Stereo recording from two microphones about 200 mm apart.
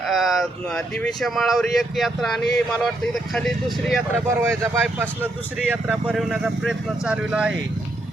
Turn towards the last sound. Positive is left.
turn(degrees=-5)  # may be behind; listen again after turning